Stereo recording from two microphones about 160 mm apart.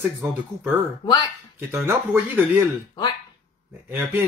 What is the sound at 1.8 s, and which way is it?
Speech, 10° right (ahead or behind).